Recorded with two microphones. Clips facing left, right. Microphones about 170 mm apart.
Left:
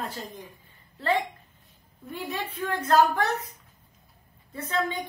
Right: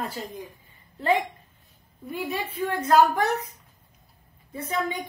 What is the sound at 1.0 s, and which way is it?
A woman's voice, 15° right (ahead or behind).